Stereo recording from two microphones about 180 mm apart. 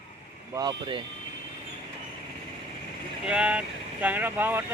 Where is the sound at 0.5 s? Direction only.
25° right (ahead or behind).